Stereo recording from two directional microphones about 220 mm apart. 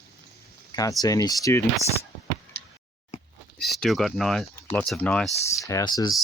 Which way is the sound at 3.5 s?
Centre (ahead or behind).